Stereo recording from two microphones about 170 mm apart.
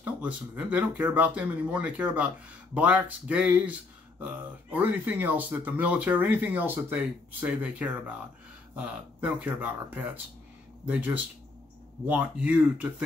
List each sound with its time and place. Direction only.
0.0 s speech: 10° right (ahead or behind)